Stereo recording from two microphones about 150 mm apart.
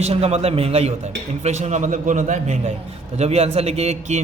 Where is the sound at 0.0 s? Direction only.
45° right (ahead or behind).